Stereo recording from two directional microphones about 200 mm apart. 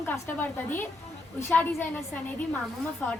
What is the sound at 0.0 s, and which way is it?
A woman's voice, 10° left (ahead or behind).